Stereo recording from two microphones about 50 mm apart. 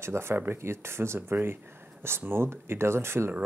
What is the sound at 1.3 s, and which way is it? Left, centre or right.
Speech, right.